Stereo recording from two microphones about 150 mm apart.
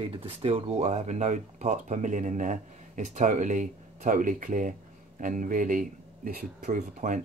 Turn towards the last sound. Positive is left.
turn(degrees=-60)  # may be behind; listen again after turning